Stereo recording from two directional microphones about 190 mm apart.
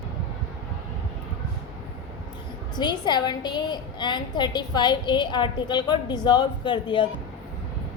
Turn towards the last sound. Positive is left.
turn(degrees=25)  # may be behind; listen again after turning